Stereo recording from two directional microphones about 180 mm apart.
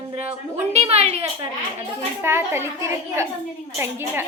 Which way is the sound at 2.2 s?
15° right (ahead or behind).